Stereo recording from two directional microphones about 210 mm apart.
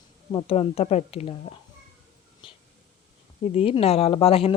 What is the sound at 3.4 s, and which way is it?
Speech, 30° left (ahead or behind).